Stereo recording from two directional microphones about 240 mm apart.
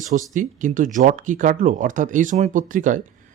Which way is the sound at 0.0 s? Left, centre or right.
Right.